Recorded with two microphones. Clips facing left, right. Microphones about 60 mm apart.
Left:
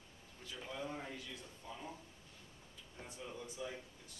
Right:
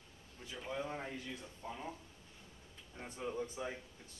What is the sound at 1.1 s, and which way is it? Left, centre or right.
Speech, right.